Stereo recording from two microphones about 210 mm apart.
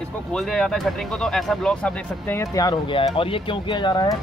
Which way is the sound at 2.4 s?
15° left (ahead or behind).